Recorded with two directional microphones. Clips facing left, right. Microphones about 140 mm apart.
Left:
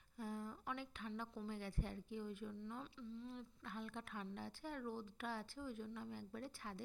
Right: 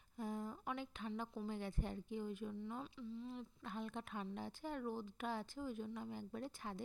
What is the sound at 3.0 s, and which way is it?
Speech, 5° right (ahead or behind).